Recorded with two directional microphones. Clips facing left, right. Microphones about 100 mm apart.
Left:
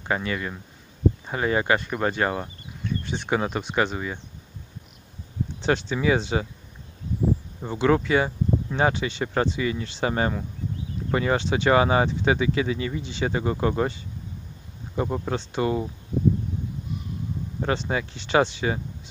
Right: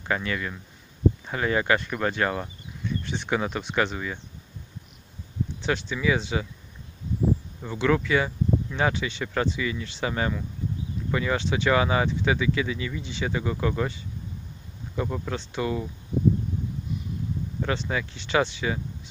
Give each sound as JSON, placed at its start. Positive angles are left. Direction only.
{"t": 0.0, "sound": "speech", "side_deg": 25}
{"t": 5.7, "sound": "speech", "side_deg": 40}
{"t": 7.6, "sound": "speech", "side_deg": 30}
{"t": 15.0, "sound": "speech", "side_deg": 30}
{"t": 17.7, "sound": "speech", "side_deg": 35}